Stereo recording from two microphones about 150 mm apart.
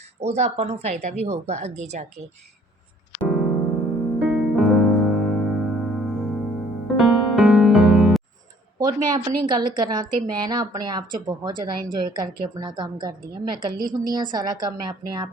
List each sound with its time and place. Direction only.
0.2 s a woman's voice: 45° right (ahead or behind)
3.2 s keyboard: centre (ahead or behind)
4.2 s music: centre (ahead or behind)
8.8 s a woman's voice: 25° right (ahead or behind)